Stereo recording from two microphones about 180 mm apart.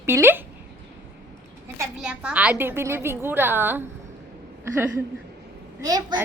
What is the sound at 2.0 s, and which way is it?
A woman's voice, 5° right (ahead or behind).